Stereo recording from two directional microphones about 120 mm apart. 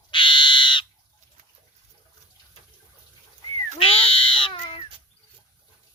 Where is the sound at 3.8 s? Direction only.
50° left (ahead or behind).